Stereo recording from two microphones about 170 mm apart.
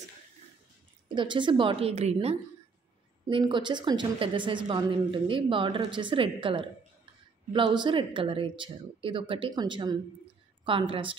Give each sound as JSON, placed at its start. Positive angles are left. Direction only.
{"t": 1.0, "sound": "a woman's voice", "side_deg": -30}
{"t": 3.3, "sound": "a woman's voice", "side_deg": -30}